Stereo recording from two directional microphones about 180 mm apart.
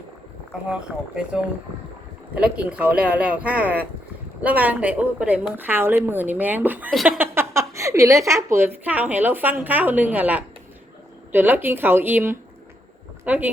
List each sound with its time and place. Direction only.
0.7 s a woman's voice: 5° right (ahead or behind)
6.9 s speech: centre (ahead or behind)
7.2 s a woman's voice: 15° right (ahead or behind)